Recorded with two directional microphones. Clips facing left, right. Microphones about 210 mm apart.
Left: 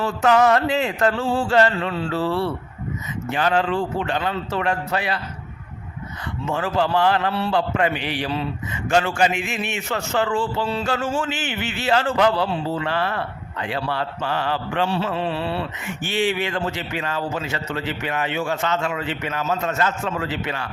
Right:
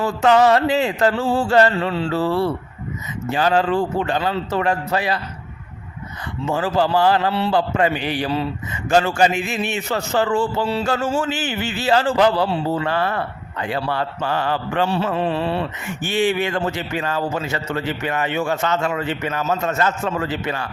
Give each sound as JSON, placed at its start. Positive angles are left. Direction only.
{"t": 0.2, "sound": "a man's voice", "side_deg": -30}
{"t": 2.1, "sound": "a man's voice", "side_deg": -40}
{"t": 6.4, "sound": "a man's voice", "side_deg": -35}
{"t": 7.5, "sound": "a man's voice", "side_deg": -40}